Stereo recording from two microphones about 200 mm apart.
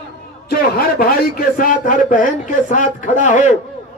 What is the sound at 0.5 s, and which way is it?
A man's voice, 50° left (ahead or behind).